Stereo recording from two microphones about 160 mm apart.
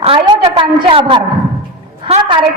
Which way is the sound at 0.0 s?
35° right (ahead or behind).